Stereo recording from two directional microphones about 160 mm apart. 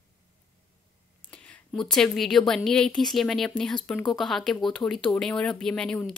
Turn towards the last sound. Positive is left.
turn(degrees=5)  # may be behind; listen again after turning